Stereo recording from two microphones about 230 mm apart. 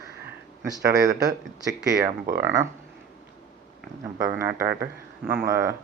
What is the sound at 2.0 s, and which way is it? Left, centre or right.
Speech, right.